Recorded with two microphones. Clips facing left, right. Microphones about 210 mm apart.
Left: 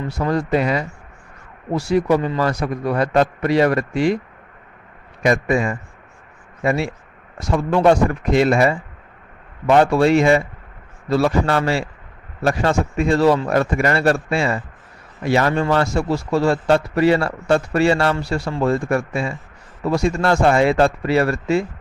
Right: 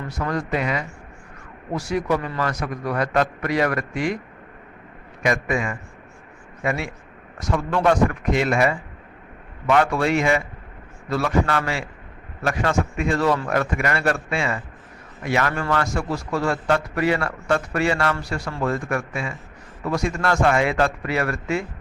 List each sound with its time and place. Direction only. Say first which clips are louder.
0.1 s a man's voice: left 6 dB; 30° left (ahead or behind)
5.2 s a man's voice: left 5 dB; 35° left (ahead or behind)